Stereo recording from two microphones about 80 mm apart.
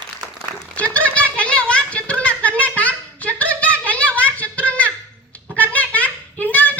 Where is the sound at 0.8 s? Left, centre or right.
Centre.